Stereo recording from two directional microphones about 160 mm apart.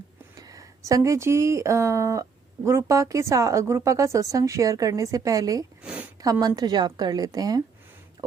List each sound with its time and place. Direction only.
0.3 s a woman's voice: 20° right (ahead or behind)
5.8 s a sound: 10° right (ahead or behind)
6.6 s a woman's voice: 25° right (ahead or behind)